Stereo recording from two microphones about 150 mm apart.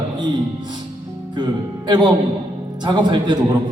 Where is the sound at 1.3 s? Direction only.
30° right (ahead or behind).